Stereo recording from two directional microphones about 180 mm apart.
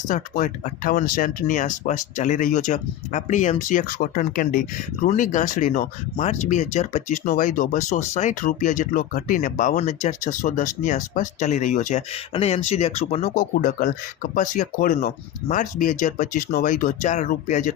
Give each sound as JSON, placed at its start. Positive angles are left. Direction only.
{"t": 0.1, "sound": "speech", "side_deg": 45}